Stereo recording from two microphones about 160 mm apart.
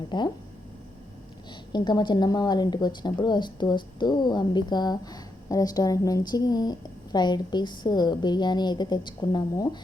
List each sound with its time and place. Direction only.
0.1 s speech: 30° left (ahead or behind)
1.7 s speech: 25° left (ahead or behind)